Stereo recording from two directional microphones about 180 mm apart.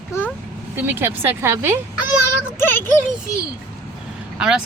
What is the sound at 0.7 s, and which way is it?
Speech, 10° right (ahead or behind).